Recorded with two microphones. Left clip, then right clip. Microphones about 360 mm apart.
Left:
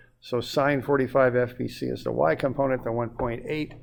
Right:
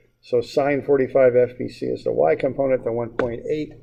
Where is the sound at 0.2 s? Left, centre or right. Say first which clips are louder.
Right 5 dB; left.